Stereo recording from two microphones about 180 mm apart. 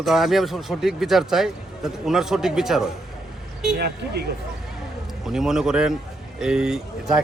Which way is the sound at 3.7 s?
65° right (ahead or behind).